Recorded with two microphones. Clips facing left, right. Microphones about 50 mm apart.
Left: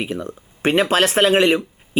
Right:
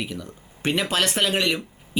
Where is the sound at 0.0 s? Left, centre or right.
Left.